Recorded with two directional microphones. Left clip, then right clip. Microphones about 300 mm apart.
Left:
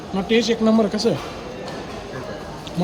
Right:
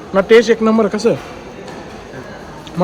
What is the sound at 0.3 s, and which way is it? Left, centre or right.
Speech, centre.